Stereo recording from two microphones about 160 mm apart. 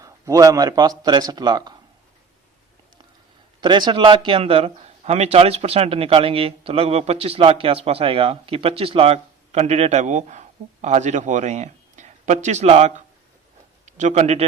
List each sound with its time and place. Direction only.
0.0 s speech: 20° right (ahead or behind)
3.6 s a man's voice: 30° right (ahead or behind)